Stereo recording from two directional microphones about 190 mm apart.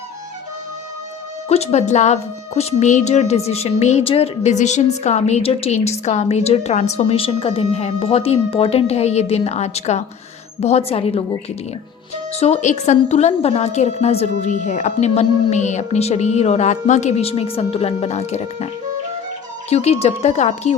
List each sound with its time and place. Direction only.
1.5 s a woman's voice: 35° left (ahead or behind)
12.3 s a woman's voice: 35° left (ahead or behind)
19.7 s a woman's voice: 35° left (ahead or behind)